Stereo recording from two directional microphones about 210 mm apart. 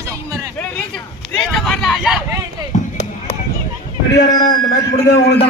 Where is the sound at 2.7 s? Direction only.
35° left (ahead or behind).